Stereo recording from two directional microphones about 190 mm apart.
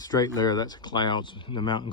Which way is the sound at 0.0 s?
20° left (ahead or behind).